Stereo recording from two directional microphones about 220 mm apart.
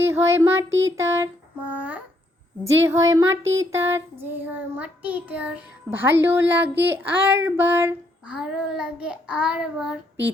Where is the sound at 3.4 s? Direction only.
60° right (ahead or behind).